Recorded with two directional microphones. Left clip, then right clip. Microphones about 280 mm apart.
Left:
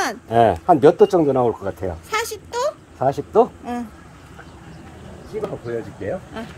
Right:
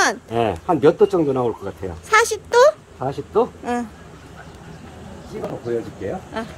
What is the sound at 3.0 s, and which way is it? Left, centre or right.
Speech, left.